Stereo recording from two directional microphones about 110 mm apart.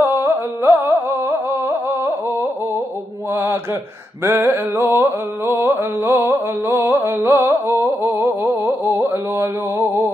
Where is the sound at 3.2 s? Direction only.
20° right (ahead or behind).